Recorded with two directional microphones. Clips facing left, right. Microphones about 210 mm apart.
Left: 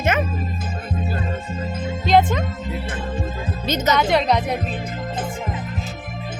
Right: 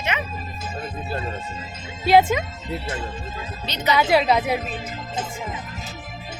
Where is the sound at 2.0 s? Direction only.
10° right (ahead or behind).